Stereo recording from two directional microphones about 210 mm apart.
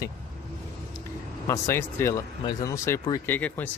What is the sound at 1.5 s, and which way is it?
Speech, 10° left (ahead or behind).